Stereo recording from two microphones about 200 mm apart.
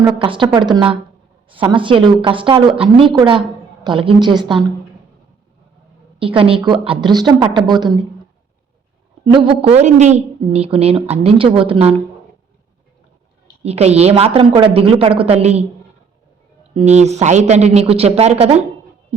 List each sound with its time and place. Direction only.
0.0 s a woman's voice: 25° right (ahead or behind)
6.1 s a woman's voice: 25° right (ahead or behind)
9.2 s a woman's voice: 25° right (ahead or behind)
13.6 s a woman's voice: 30° right (ahead or behind)
16.7 s speech: 35° right (ahead or behind)